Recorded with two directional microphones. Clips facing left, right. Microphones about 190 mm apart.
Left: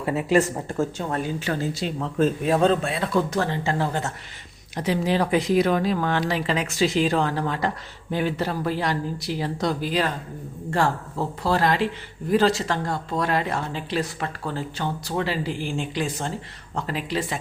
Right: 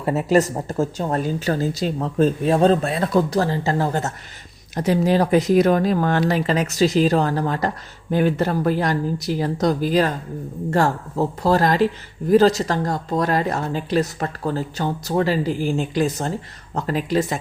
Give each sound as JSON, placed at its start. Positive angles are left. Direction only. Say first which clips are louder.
{"t": 0.0, "sound": "speech", "louder": "right 3 dB", "side_deg": -40}